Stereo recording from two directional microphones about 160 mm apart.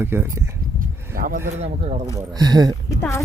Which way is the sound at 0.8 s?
60° right (ahead or behind).